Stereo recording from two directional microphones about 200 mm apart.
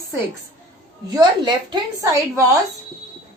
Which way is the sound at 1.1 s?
20° right (ahead or behind).